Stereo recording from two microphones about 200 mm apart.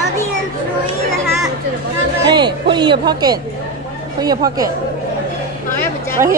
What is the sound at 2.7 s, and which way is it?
Speech, 20° right (ahead or behind).